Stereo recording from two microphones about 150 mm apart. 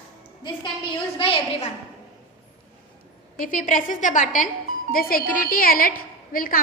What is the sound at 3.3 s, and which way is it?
A woman's voice, 60° left (ahead or behind).